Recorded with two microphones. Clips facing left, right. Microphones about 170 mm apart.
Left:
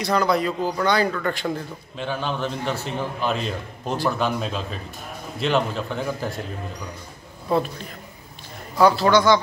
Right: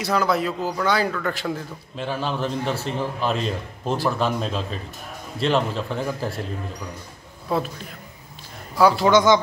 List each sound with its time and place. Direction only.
0.0 s a man's voice: 5° right (ahead or behind)
7.5 s a man's voice: 5° right (ahead or behind)
8.7 s speech: 10° right (ahead or behind)